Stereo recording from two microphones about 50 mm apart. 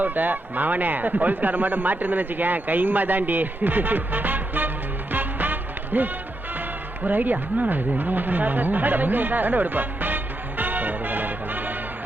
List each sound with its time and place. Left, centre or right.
0.0 s speech: right
5.1 s music: right
7.0 s speech: right
10.6 s music: right